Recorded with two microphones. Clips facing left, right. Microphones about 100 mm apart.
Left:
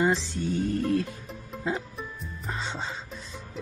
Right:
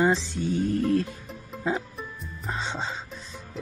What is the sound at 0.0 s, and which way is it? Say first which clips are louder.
Music: right 2 dB; 15° right (ahead or behind).